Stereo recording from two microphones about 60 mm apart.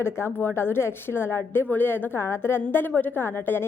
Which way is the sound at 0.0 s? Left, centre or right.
Left.